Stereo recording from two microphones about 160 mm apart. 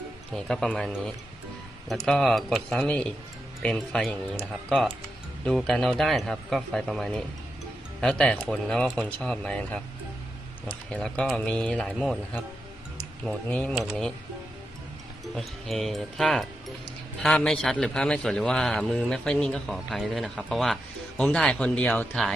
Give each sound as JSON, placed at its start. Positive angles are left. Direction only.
{"t": 0.3, "sound": "a man's voice", "side_deg": 5}
{"t": 2.0, "sound": "a man's voice", "side_deg": 0}
{"t": 13.2, "sound": "speech", "side_deg": 10}
{"t": 15.4, "sound": "a man's voice", "side_deg": 0}